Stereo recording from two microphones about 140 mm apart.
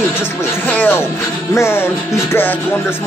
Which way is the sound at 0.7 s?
10° left (ahead or behind).